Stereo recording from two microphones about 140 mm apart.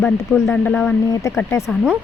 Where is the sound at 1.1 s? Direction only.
20° left (ahead or behind).